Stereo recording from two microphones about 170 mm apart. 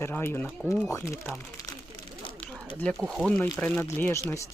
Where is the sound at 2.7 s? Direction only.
5° left (ahead or behind).